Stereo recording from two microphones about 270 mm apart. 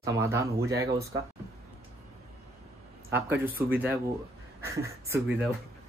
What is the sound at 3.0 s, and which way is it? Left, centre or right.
Speech, centre.